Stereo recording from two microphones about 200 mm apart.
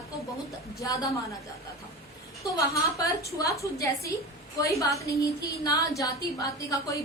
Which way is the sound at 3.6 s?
15° left (ahead or behind).